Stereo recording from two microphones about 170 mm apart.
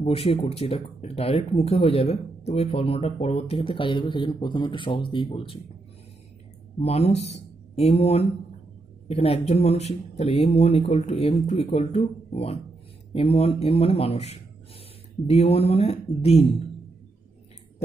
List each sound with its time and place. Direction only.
0.0 s speech: 35° left (ahead or behind)
6.8 s speech: 35° left (ahead or behind)